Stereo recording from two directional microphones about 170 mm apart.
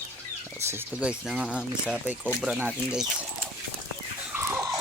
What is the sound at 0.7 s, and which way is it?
Speech, 10° right (ahead or behind).